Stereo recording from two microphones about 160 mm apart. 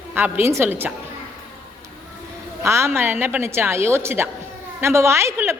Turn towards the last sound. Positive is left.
turn(degrees=-15)  # may be behind; listen again after turning